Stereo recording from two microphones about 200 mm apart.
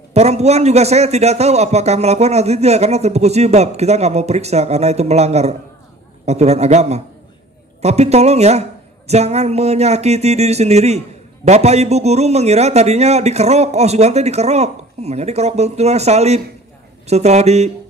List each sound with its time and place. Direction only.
0.1 s a man's voice: 35° right (ahead or behind)